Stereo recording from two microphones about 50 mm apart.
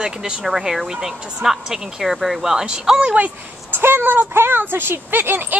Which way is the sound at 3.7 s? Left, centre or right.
Right.